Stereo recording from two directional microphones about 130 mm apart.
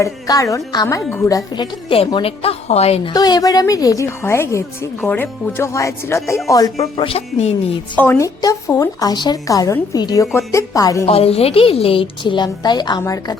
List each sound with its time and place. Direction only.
0.0 s speech: 25° left (ahead or behind)
1.9 s a woman's voice: 40° left (ahead or behind)
3.1 s speech: 30° left (ahead or behind)
6.7 s a woman's voice: 45° left (ahead or behind)
7.9 s a woman's voice: 15° left (ahead or behind)
8.4 s speech: 25° left (ahead or behind)
11.0 s a woman's voice: 50° left (ahead or behind); by 13.3 s 30° left (ahead or behind)